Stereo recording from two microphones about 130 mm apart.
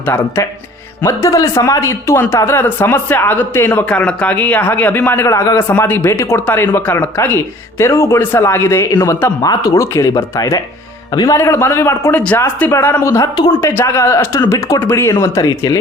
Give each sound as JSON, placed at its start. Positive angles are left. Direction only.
{"t": 0.0, "sound": "speech", "side_deg": 20}
{"t": 13.5, "sound": "speech", "side_deg": 20}